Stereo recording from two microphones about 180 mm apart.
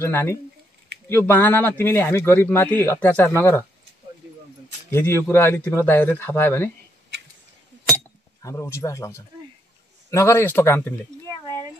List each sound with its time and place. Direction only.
0.0 s speech: 10° left (ahead or behind)
4.9 s speech: 15° left (ahead or behind)
8.4 s speech: 15° left (ahead or behind)